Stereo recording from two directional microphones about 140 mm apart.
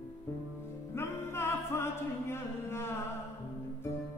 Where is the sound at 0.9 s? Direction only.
15° left (ahead or behind).